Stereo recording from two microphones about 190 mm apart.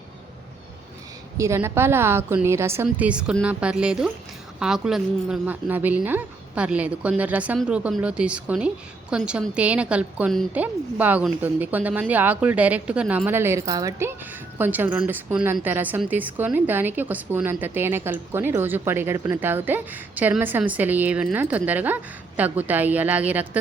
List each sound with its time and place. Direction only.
1.4 s speech: 15° right (ahead or behind)